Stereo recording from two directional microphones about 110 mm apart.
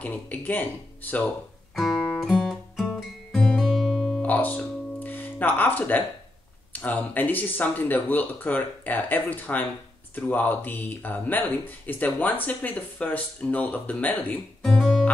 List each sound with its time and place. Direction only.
0.0 s a man's voice: 15° left (ahead or behind)
2.2 s guitar: centre (ahead or behind)
4.2 s guitar: 15° left (ahead or behind)
6.7 s a man's voice: 15° left (ahead or behind)
14.6 s music: 5° left (ahead or behind)